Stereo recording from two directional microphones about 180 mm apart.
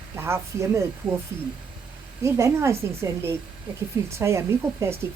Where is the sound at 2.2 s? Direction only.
15° right (ahead or behind).